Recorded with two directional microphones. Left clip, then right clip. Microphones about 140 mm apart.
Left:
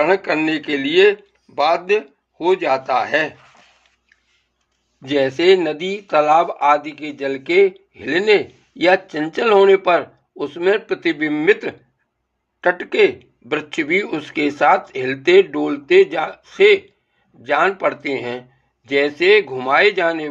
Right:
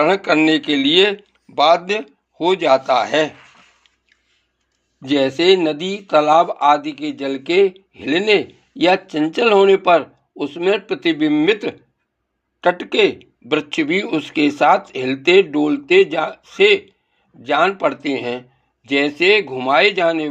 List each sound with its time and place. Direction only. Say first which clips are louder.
0.0 s a man's voice: right 2 dB; 45° right (ahead or behind)
5.0 s speech: even; 25° right (ahead or behind)